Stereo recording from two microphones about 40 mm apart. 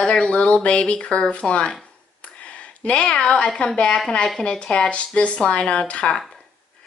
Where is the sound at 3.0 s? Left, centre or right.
Centre.